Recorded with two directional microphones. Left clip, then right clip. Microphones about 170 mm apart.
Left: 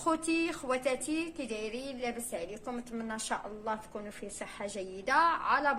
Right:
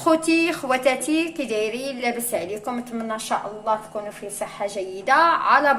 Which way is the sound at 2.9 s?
35° left (ahead or behind).